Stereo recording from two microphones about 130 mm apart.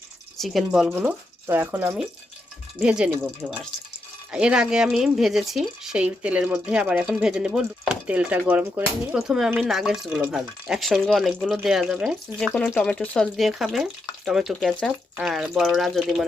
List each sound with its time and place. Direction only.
0.3 s speech: centre (ahead or behind)
0.9 s speech: 20° right (ahead or behind)
2.7 s speech: 10° right (ahead or behind)
3.4 s speech: centre (ahead or behind)